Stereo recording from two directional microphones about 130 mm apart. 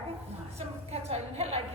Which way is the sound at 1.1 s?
50° right (ahead or behind).